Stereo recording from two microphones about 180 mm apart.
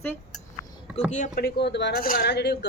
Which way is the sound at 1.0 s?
45° left (ahead or behind).